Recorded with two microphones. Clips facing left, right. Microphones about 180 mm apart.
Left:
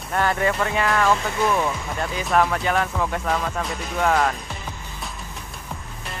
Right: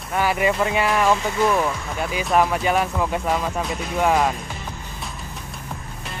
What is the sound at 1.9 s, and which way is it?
Speech, 5° right (ahead or behind).